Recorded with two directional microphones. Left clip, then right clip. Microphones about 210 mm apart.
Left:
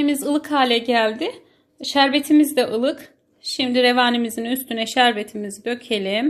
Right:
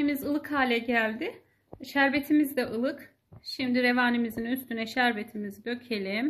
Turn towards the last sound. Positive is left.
turn(degrees=30)  # may be behind; listen again after turning